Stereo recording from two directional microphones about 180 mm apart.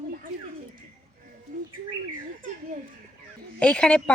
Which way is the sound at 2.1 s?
50° right (ahead or behind).